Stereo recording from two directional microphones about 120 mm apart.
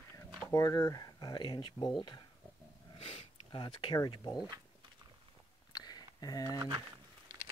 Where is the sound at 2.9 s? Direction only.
50° left (ahead or behind).